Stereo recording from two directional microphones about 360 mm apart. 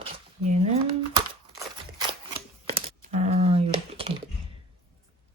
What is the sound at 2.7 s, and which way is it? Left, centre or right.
Computer keyboard, centre.